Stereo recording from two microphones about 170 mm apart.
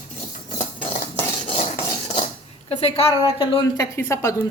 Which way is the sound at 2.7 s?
35° left (ahead or behind).